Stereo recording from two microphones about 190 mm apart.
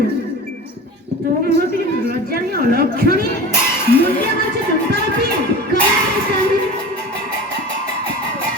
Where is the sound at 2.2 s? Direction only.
55° right (ahead or behind).